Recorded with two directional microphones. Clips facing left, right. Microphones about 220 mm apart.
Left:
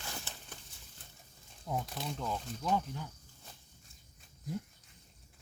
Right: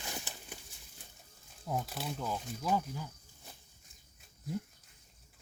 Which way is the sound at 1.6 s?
5° right (ahead or behind).